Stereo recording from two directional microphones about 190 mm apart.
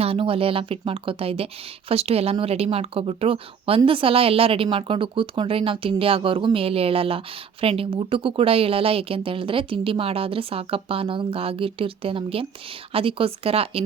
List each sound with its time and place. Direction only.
0.0 s speech: 30° right (ahead or behind)